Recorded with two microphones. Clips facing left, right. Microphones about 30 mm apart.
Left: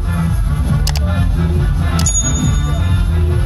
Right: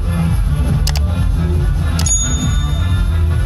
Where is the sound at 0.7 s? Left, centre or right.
Centre.